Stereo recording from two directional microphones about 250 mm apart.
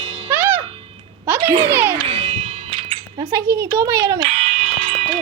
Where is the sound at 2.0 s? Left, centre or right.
Right.